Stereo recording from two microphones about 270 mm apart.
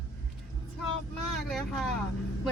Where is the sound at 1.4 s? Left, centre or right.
Centre.